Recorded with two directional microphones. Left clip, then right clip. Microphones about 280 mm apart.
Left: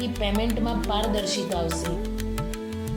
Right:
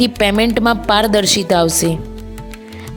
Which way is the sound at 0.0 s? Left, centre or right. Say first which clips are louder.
Right 13 dB; right.